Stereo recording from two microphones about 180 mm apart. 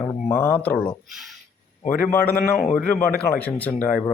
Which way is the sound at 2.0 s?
10° left (ahead or behind).